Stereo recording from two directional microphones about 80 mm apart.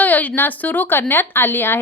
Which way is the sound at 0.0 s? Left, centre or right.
Left.